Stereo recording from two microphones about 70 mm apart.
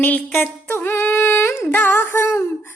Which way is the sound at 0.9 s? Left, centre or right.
Left.